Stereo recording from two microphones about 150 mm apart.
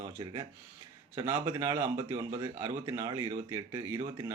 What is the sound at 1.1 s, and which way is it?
Speech, 20° right (ahead or behind).